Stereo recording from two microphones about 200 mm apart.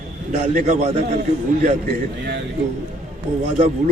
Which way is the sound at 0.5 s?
35° right (ahead or behind).